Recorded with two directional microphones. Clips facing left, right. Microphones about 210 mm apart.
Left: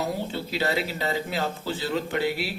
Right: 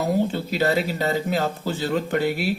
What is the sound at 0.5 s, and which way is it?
Speech, 45° right (ahead or behind).